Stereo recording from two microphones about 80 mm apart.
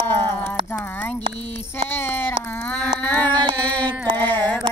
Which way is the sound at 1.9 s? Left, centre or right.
Left.